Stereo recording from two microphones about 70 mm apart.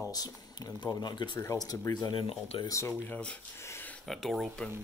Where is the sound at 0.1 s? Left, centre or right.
Left.